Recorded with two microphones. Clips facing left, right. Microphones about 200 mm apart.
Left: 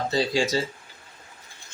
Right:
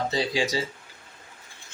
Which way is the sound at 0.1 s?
15° right (ahead or behind).